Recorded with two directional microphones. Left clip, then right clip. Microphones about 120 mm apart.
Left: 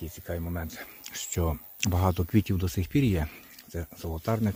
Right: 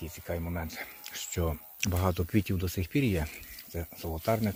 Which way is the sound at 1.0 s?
45° left (ahead or behind).